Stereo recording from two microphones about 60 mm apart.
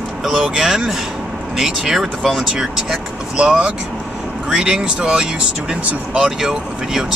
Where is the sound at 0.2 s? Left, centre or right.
Centre.